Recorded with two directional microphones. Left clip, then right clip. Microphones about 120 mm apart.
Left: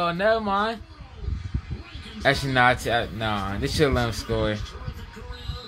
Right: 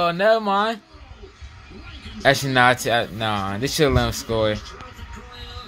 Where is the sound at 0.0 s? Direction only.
35° right (ahead or behind).